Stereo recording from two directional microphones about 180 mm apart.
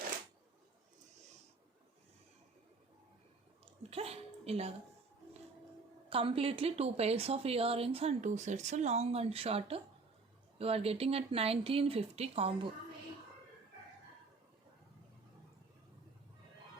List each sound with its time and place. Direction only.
3.8 s a woman's voice: 35° right (ahead or behind)
6.1 s speech: 30° right (ahead or behind)